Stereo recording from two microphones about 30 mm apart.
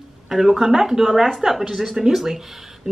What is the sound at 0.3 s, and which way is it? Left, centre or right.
Speech, centre.